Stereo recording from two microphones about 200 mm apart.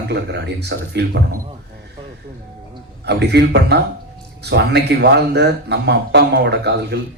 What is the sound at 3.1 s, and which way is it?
A man's voice, 60° right (ahead or behind).